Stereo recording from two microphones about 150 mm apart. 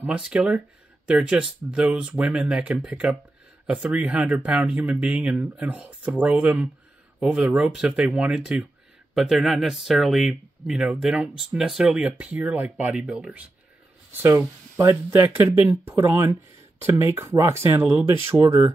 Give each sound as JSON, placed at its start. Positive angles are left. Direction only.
{"t": 0.0, "sound": "speech", "side_deg": -5}